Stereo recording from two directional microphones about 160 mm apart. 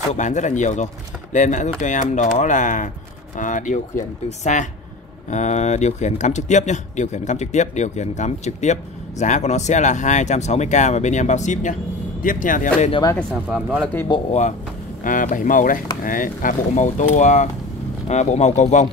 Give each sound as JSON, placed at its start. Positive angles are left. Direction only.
{"t": 0.1, "sound": "speech", "side_deg": 50}
{"t": 13.3, "sound": "speech", "side_deg": -5}
{"t": 15.0, "sound": "speech", "side_deg": 55}